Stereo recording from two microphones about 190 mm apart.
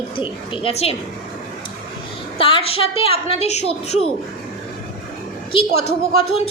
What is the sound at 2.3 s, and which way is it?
A woman's voice, 30° left (ahead or behind).